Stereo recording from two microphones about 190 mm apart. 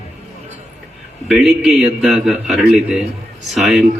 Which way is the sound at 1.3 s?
5° right (ahead or behind).